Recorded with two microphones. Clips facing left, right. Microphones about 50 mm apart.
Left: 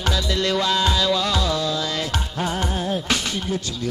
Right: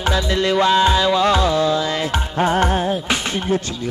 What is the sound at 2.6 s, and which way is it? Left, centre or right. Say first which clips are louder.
Music: right 8 dB; right.